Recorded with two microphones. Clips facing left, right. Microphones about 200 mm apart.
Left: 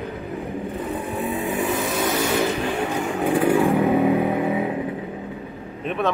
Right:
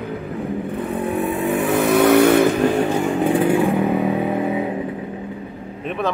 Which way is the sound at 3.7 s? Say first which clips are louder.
Left 1 dB; centre (ahead or behind).